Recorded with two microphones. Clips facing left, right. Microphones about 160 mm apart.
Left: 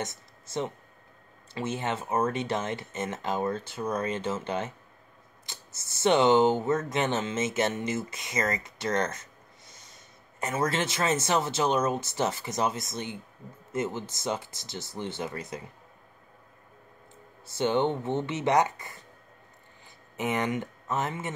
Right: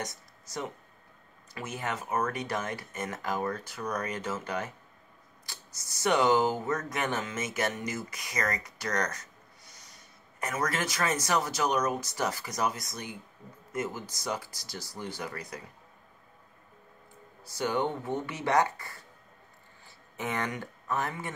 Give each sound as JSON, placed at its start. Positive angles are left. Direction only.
{"t": 0.0, "sound": "a sound", "side_deg": 25}
{"t": 1.5, "sound": "speech", "side_deg": 25}
{"t": 17.5, "sound": "speech", "side_deg": 25}
{"t": 20.2, "sound": "speech", "side_deg": 20}